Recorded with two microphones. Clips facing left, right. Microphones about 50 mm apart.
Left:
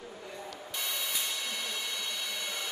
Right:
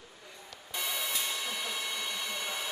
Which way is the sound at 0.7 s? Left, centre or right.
Centre.